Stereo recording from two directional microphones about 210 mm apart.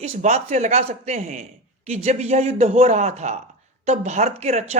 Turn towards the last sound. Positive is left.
turn(degrees=-30)  # may be behind; listen again after turning